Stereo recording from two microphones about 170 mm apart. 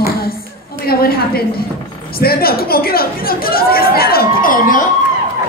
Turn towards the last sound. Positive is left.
turn(degrees=60)  # may be behind; listen again after turning